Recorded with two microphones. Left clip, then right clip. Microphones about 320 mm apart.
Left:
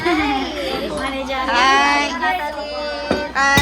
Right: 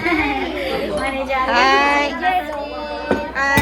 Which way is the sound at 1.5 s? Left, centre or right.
Centre.